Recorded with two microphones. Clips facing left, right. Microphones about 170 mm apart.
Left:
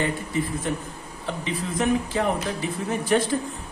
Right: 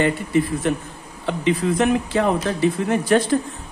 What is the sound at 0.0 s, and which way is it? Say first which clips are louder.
Speech: right 7 dB; 70° right (ahead or behind).